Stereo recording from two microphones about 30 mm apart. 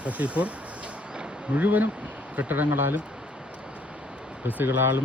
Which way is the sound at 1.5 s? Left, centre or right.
Right.